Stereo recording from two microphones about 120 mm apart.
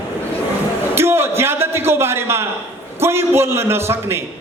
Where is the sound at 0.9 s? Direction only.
20° right (ahead or behind).